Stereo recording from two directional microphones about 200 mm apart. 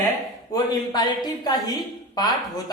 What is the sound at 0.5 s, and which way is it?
A woman's voice, 20° left (ahead or behind).